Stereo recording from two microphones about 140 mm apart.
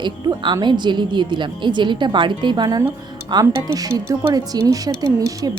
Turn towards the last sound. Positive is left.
turn(degrees=-25)  # may be behind; listen again after turning